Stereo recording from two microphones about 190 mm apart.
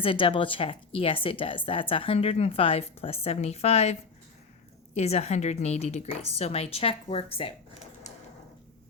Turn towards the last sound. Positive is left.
turn(degrees=30)  # may be behind; listen again after turning